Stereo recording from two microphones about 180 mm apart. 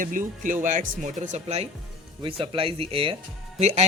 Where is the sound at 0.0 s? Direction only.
50° right (ahead or behind).